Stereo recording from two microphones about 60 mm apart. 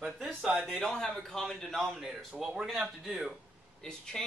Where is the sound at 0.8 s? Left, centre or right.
Centre.